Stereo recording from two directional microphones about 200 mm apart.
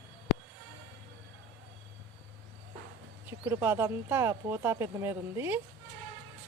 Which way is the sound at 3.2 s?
10° right (ahead or behind).